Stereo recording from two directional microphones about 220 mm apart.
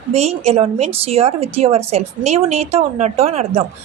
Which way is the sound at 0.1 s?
30° right (ahead or behind).